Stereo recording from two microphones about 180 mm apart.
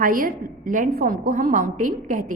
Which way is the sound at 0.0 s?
50° right (ahead or behind).